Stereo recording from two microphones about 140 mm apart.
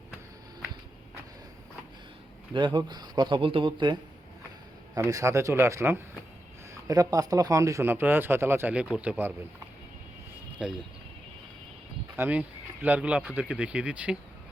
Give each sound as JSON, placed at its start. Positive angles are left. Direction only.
{"t": 2.5, "sound": "speech", "side_deg": -35}
{"t": 4.9, "sound": "speech", "side_deg": -25}
{"t": 10.6, "sound": "speech", "side_deg": -5}
{"t": 12.1, "sound": "speech", "side_deg": -10}